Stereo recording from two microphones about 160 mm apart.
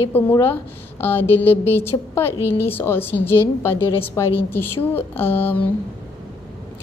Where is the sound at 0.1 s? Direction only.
10° left (ahead or behind).